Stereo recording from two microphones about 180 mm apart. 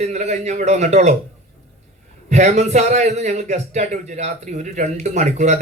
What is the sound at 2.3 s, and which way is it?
A man's voice, 40° right (ahead or behind).